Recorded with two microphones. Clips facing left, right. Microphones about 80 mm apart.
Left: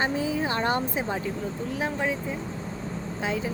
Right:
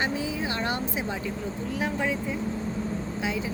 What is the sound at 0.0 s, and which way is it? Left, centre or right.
Speech, left.